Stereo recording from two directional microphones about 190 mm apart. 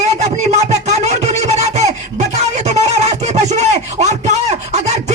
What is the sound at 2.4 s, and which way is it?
Music, 35° right (ahead or behind).